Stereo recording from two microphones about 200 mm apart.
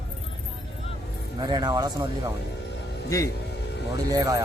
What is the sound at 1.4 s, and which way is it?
Speech, 20° right (ahead or behind).